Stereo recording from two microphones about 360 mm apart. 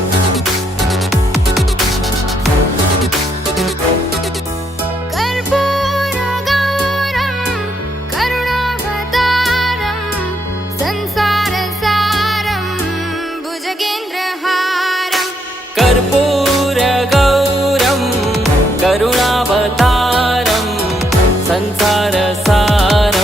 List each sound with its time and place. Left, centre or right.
0.3 s music: centre
5.1 s music: centre
14.4 s music: centre